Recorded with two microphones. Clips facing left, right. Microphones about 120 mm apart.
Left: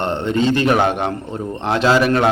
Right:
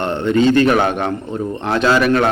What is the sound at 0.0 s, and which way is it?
A man's voice, 30° left (ahead or behind).